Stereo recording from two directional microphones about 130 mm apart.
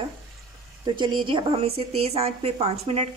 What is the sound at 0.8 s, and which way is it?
A woman's voice, 35° right (ahead or behind).